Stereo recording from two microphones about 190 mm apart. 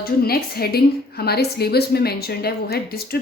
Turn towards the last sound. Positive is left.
turn(degrees=55)  # may be behind; listen again after turning